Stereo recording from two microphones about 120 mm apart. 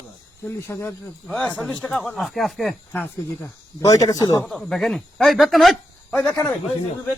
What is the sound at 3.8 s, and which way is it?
Speech, 30° left (ahead or behind).